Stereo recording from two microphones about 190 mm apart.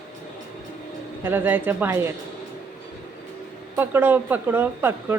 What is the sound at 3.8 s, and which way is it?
Speech, 10° right (ahead or behind).